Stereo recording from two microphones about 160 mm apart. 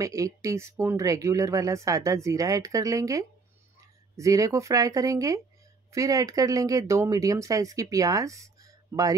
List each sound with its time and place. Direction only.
0.0 s speech: 20° right (ahead or behind)